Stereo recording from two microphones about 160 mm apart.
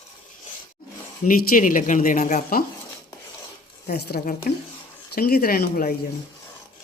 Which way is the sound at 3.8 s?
85° left.